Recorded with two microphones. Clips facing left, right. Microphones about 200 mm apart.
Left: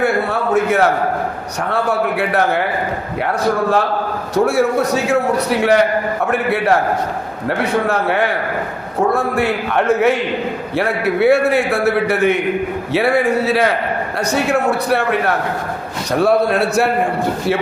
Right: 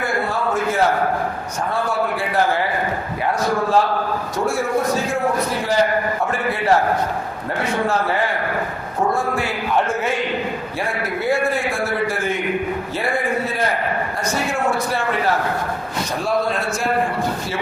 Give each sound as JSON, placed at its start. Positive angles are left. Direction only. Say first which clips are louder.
{"t": 0.0, "sound": "a sound", "louder": "left 5 dB", "side_deg": 65}
{"t": 1.7, "sound": "a man's voice", "louder": "left 5 dB", "side_deg": 65}
{"t": 4.4, "sound": "a man's voice", "louder": "left 7 dB", "side_deg": 65}
{"t": 7.9, "sound": "a man's voice", "louder": "left 3 dB", "side_deg": 65}